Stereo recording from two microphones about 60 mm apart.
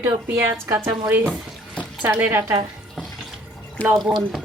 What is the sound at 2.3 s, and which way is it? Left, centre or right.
Speech, right.